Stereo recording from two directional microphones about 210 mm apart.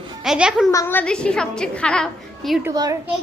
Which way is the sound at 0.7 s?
10° left (ahead or behind).